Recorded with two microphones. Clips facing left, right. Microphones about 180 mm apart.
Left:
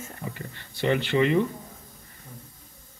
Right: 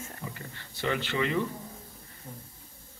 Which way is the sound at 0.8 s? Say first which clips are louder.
Left 7 dB; 20° left (ahead or behind).